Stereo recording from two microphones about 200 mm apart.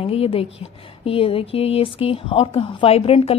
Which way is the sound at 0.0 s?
30° left (ahead or behind).